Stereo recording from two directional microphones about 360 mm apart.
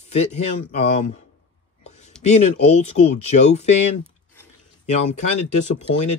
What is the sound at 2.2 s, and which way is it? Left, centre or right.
Speech, centre.